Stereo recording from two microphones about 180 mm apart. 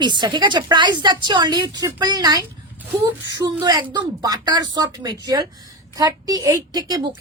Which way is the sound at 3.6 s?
25° right (ahead or behind).